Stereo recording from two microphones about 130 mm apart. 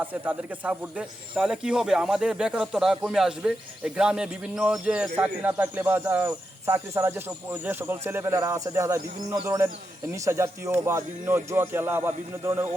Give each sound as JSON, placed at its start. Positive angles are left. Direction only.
{"t": 0.0, "sound": "speech", "side_deg": -10}